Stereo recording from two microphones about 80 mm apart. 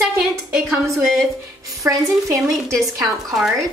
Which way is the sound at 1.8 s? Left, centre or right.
Right.